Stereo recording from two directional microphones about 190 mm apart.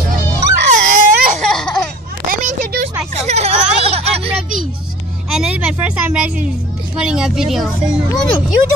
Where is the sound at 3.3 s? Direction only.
35° right (ahead or behind).